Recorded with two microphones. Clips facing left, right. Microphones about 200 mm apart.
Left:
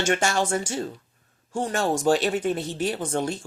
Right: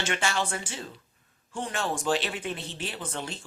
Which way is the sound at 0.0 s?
45° left (ahead or behind).